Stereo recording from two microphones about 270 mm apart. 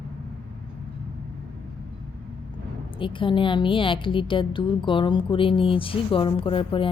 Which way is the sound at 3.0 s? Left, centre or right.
Centre.